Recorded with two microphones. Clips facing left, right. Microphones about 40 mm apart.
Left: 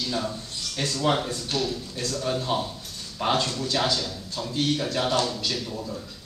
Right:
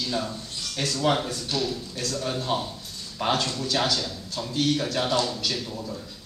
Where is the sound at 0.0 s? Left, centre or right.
Centre.